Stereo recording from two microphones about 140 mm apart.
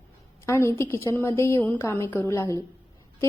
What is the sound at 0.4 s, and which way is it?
A woman's voice, 20° left (ahead or behind).